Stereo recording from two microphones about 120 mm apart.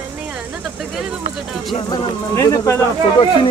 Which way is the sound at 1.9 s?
25° left (ahead or behind).